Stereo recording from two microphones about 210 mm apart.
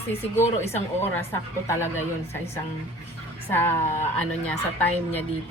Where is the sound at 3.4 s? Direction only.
10° left (ahead or behind).